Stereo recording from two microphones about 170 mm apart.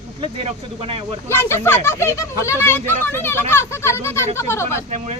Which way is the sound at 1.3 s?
15° left (ahead or behind).